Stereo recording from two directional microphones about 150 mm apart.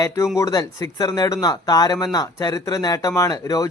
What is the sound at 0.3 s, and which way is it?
Speech, 20° left (ahead or behind).